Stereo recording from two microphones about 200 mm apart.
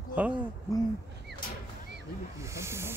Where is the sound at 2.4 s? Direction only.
15° right (ahead or behind).